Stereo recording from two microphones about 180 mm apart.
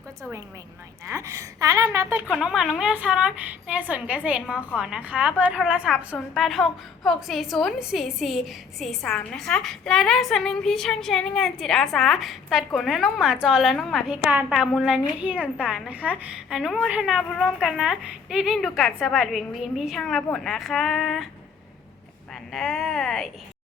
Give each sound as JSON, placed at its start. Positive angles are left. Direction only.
{"t": 0.2, "sound": "a woman's voice", "side_deg": -15}
{"t": 2.2, "sound": "a woman's voice", "side_deg": 0}
{"t": 22.5, "sound": "a woman's voice", "side_deg": 0}